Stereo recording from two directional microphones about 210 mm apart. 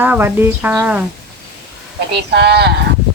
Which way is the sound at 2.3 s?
50° right (ahead or behind).